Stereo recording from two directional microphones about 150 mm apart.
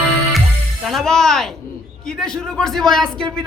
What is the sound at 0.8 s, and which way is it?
A man's voice, centre (ahead or behind).